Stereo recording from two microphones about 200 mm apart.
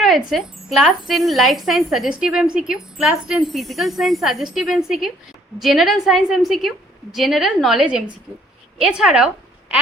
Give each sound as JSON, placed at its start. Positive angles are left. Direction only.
{"t": 0.0, "sound": "a woman's voice", "side_deg": 0}